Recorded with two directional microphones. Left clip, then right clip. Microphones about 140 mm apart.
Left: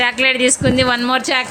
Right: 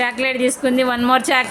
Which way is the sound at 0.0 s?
5° right (ahead or behind).